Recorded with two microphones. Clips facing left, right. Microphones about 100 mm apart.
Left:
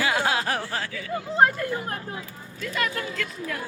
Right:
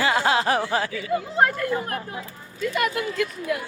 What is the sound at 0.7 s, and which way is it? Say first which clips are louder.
Speech: right 6 dB; 20° right (ahead or behind).